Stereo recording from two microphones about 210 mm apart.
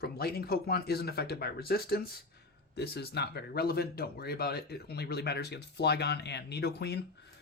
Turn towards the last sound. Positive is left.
turn(degrees=50)  # may be behind; listen again after turning